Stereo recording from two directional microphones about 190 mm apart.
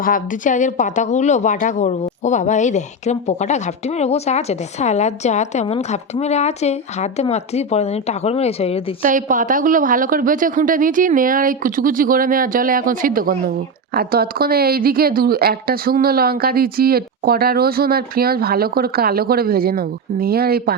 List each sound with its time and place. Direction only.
0.0 s a woman's voice: 45° left (ahead or behind)
9.0 s a woman's voice: 45° right (ahead or behind)